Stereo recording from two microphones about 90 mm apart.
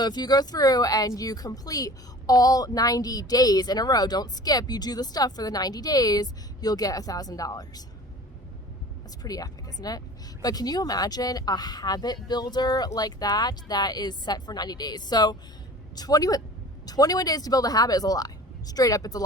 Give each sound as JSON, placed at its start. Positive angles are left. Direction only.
{"t": 0.0, "sound": "speech", "side_deg": 50}
{"t": 9.2, "sound": "speech", "side_deg": 45}